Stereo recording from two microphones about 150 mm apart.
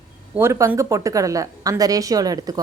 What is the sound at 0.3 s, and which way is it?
Speech, 20° right (ahead or behind).